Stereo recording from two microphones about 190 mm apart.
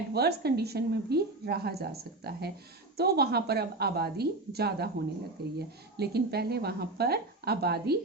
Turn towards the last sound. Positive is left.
turn(degrees=-55)  # may be behind; listen again after turning